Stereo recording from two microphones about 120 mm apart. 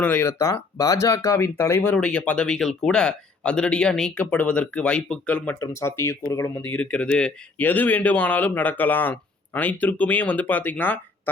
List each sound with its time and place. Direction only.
0.0 s speech: 10° left (ahead or behind)
0.3 s speech: 25° left (ahead or behind)
5.5 s speech: 25° left (ahead or behind)
6.6 s speech: 10° left (ahead or behind)